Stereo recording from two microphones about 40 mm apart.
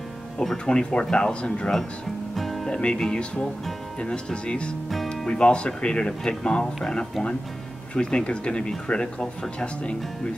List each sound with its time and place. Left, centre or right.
0.7 s speech: left
2.3 s music: centre
2.6 s speech: left
4.8 s music: centre
5.1 s speech: left